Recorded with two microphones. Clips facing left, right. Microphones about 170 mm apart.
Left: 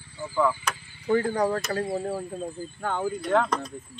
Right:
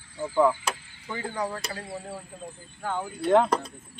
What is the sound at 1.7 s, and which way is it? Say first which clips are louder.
Speech: left 9 dB; 60° left (ahead or behind).